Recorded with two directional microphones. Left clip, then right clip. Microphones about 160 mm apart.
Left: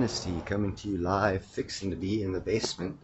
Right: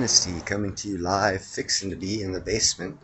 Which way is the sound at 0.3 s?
Centre (ahead or behind).